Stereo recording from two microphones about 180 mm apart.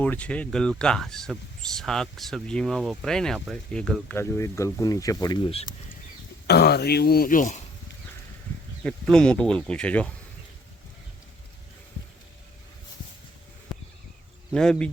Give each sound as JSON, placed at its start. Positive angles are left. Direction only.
{"t": 0.0, "sound": "speech", "side_deg": 10}
{"t": 4.2, "sound": "speech", "side_deg": 15}
{"t": 6.5, "sound": "speech", "side_deg": 65}
{"t": 8.8, "sound": "speech", "side_deg": 5}
{"t": 14.5, "sound": "speech", "side_deg": 5}